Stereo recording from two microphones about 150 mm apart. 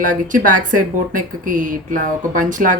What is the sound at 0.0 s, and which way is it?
Speech, 60° right (ahead or behind).